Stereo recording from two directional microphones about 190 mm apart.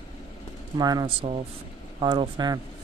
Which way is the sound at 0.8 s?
20° right (ahead or behind).